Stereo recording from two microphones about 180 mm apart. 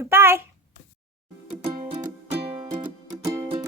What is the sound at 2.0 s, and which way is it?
Music, 35° right (ahead or behind).